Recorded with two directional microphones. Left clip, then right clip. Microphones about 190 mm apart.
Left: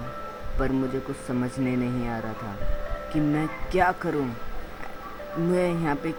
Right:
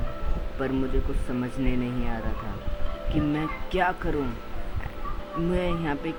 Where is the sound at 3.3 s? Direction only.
10° left (ahead or behind).